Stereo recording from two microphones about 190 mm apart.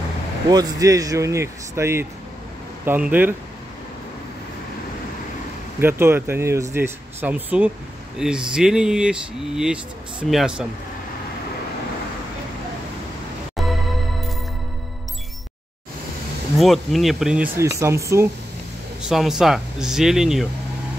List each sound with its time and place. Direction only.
0.5 s speech: 20° right (ahead or behind)
5.8 s speech: 10° right (ahead or behind)
13.6 s music: centre (ahead or behind)
16.5 s speech: centre (ahead or behind)
17.6 s speech: 15° right (ahead or behind)
19.0 s speech: centre (ahead or behind)